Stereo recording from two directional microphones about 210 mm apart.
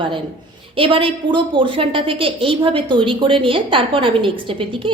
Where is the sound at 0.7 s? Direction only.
25° right (ahead or behind).